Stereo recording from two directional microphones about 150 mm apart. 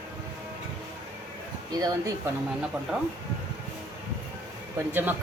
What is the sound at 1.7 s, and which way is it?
Speech, 25° right (ahead or behind).